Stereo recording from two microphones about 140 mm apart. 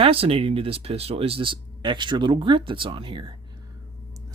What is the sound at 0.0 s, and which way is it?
Speech, 40° right (ahead or behind).